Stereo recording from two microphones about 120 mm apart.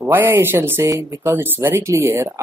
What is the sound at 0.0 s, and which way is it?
Speech, 15° right (ahead or behind).